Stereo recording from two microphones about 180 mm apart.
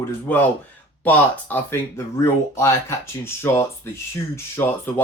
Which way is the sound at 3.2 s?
15° left (ahead or behind).